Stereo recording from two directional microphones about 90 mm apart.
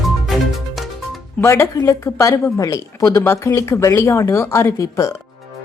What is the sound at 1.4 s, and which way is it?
Speech, 35° left (ahead or behind).